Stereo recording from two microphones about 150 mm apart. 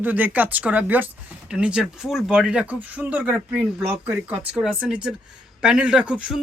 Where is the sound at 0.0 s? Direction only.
10° right (ahead or behind).